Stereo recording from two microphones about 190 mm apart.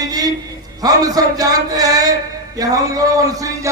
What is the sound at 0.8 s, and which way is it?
Speech, 20° right (ahead or behind).